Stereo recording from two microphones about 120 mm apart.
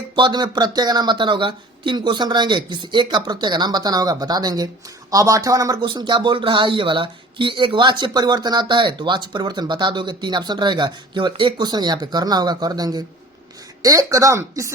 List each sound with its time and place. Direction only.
0.2 s speech: 40° right (ahead or behind)
5.8 s speech: 40° right (ahead or behind)